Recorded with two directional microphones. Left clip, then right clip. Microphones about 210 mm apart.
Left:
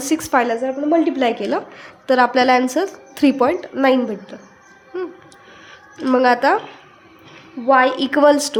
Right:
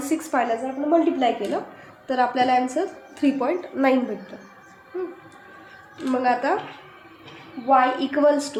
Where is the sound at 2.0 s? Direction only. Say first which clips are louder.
Left 7 dB; 45° left (ahead or behind).